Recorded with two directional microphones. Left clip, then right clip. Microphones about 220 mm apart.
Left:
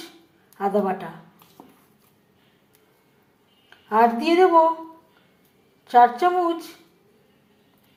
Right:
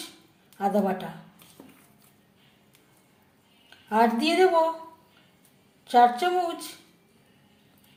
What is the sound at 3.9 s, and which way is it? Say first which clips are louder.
Speech: left 4 dB; centre (ahead or behind).